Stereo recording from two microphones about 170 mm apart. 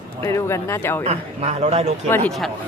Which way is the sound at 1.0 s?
40° right (ahead or behind).